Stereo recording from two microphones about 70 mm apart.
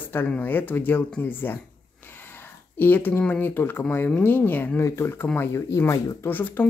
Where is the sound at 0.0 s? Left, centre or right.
Left.